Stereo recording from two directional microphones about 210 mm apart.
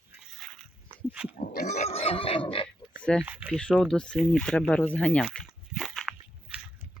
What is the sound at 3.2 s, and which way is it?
Speech, 5° right (ahead or behind).